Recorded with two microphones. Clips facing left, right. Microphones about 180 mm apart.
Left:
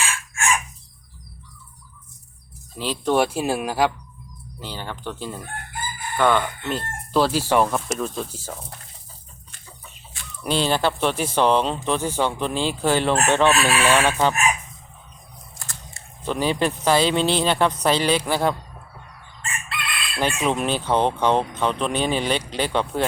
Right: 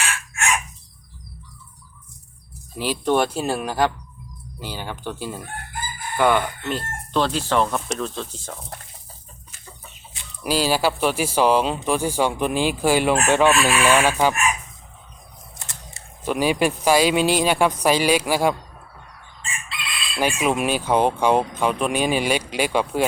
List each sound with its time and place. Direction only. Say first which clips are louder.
0.1 s chicken: left 1 dB; 70° right (ahead or behind)
2.7 s speech: right 2 dB; 10° right (ahead or behind)
3.0 s speech: left 1 dB; 5° left (ahead or behind)
4.6 s speech: right 1 dB; 10° right (ahead or behind); by 8.5 s 10° left (ahead or behind)
10.4 s speech: right 1 dB; 5° right (ahead or behind)
15.5 s camera: even; 20° right (ahead or behind)
16.2 s speech: right 2 dB; 10° right (ahead or behind)
19.5 s crowing: left 3 dB; 60° left (ahead or behind)
20.4 s speech: right 1 dB; 10° right (ahead or behind)